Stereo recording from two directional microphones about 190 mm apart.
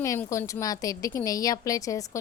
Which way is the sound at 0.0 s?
15° left (ahead or behind).